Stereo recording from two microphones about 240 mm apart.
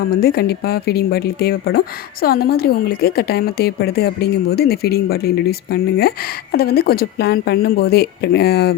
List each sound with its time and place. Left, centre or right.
0.1 s a woman's voice: left